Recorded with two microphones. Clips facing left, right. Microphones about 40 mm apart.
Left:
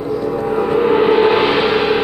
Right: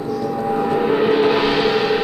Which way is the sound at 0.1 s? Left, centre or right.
Left.